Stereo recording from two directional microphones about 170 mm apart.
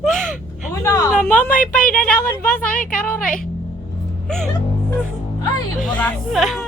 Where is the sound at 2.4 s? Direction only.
50° left (ahead or behind).